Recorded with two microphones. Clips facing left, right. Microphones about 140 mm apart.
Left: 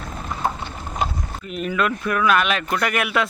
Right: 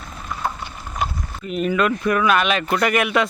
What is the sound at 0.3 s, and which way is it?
Vehicle, 25° left (ahead or behind).